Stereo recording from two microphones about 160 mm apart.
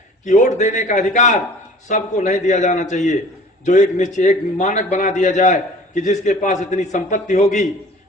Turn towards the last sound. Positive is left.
turn(degrees=50)  # may be behind; listen again after turning